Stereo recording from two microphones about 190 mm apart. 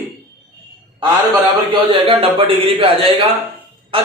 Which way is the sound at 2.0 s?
30° right (ahead or behind).